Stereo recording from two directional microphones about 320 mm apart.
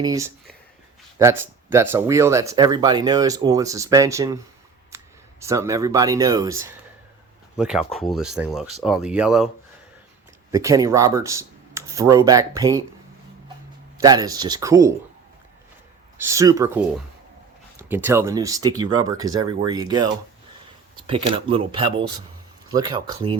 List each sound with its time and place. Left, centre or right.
0.0 s speech: centre
5.4 s speech: centre
10.5 s speech: centre
14.0 s speech: centre
16.1 s speech: centre
21.1 s speech: centre